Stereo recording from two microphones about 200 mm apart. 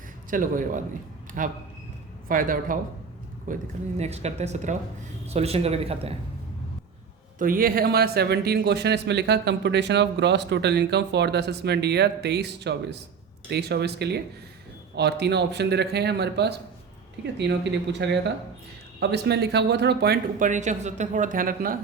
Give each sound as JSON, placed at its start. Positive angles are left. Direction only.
{"t": 0.3, "sound": "speech", "side_deg": -40}
{"t": 7.3, "sound": "speech", "side_deg": -45}